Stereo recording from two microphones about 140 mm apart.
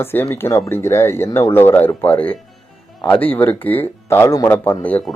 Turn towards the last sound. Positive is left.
turn(degrees=10)  # may be behind; listen again after turning